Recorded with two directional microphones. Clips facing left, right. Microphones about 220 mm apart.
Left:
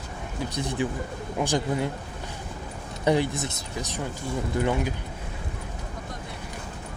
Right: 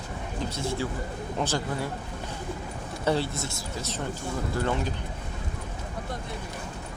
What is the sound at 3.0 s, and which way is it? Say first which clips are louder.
Speech: left 4 dB; 15° left (ahead or behind).